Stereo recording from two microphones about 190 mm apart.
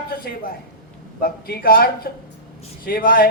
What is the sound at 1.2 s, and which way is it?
A man's voice, 50° left (ahead or behind).